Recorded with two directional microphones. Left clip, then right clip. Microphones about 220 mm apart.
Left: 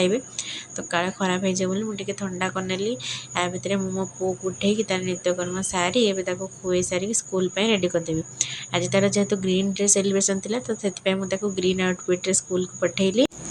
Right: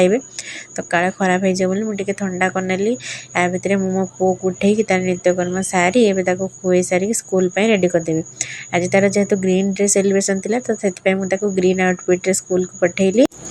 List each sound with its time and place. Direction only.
0.8 s a woman's voice: 25° right (ahead or behind)